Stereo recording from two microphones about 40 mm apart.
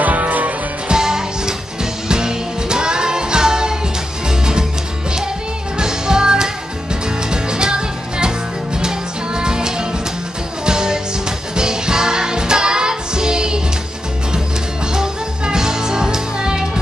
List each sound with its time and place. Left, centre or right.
0.0 s music: right
0.8 s music: centre
5.8 s music: centre
14.9 s music: centre